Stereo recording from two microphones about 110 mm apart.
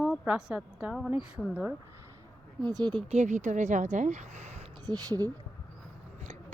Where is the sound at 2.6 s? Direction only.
40° right (ahead or behind).